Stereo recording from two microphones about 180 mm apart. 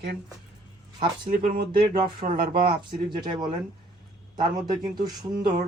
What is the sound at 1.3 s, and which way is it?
Speech, 55° right (ahead or behind).